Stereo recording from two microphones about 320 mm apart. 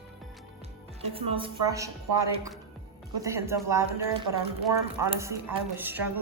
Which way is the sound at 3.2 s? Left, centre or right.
Centre.